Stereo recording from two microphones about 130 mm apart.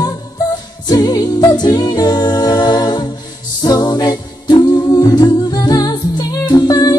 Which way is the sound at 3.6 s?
30° left (ahead or behind).